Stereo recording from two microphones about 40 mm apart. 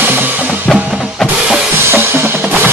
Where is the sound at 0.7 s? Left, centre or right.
Right.